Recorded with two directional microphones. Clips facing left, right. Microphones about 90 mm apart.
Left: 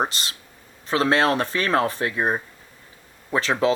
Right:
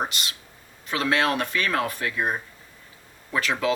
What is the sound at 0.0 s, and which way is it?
Speech, 35° left (ahead or behind).